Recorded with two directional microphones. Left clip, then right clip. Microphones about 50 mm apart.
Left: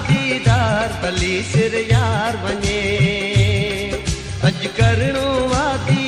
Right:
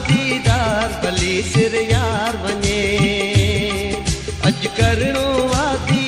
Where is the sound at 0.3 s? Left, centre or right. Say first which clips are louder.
Left 2 dB; right.